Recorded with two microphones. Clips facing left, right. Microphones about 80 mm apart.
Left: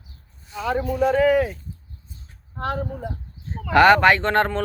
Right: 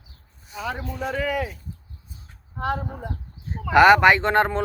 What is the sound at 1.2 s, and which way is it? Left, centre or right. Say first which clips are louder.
Speech: left 7 dB; left.